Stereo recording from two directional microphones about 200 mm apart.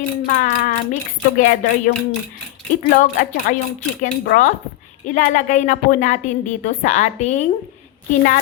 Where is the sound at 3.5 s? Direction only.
45° left (ahead or behind).